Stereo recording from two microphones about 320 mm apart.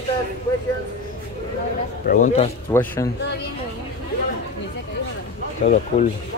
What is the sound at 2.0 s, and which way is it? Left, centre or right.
Speech, left.